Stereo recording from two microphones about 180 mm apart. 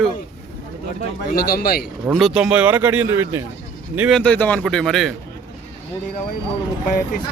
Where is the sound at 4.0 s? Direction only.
Centre (ahead or behind).